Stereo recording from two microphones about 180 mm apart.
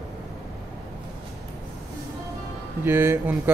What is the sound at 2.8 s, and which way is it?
Speech, 15° right (ahead or behind).